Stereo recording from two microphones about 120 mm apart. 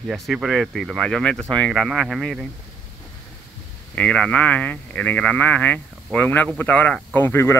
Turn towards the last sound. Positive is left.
turn(degrees=20)  # may be behind; listen again after turning